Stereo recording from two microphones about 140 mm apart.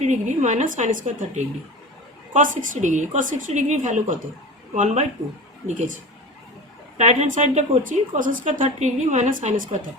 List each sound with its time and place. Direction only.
0.0 s a woman's voice: 60° right (ahead or behind)
6.9 s a woman's voice: 50° right (ahead or behind)